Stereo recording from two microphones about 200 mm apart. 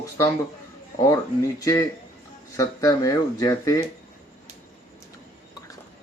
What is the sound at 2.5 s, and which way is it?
Speech, 15° left (ahead or behind).